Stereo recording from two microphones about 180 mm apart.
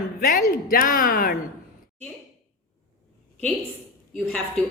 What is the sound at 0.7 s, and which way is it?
Speech, 55° left (ahead or behind).